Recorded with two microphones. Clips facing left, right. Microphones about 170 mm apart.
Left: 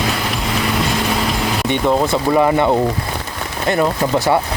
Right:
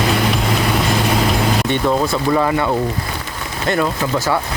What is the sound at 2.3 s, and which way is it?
Speech, 20° left (ahead or behind).